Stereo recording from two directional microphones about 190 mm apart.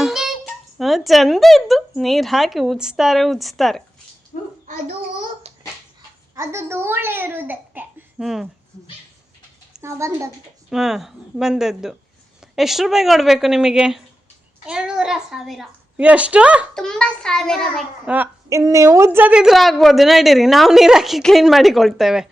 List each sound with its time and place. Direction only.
0.0 s a sound: centre (ahead or behind)
0.8 s a woman's voice: centre (ahead or behind)
4.6 s a child's voice: 35° right (ahead or behind)
6.3 s a child's voice: 15° right (ahead or behind)
9.8 s a child's voice: 15° right (ahead or behind)
10.7 s a woman's voice: centre (ahead or behind)
18.1 s a woman's voice: 10° right (ahead or behind)